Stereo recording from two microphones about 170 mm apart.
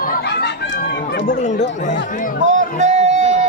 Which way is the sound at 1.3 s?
45° left (ahead or behind).